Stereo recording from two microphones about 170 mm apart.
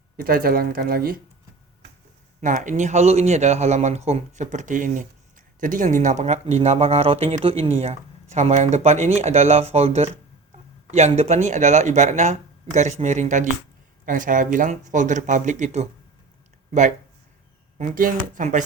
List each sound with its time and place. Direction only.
0.2 s speech: 60° right (ahead or behind)
2.4 s speech: 50° right (ahead or behind)
17.7 s speech: 50° right (ahead or behind)